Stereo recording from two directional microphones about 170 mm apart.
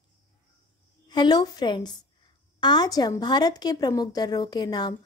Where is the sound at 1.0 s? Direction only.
25° left (ahead or behind).